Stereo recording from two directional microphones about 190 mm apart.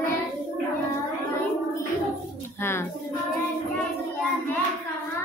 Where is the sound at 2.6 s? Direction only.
10° left (ahead or behind).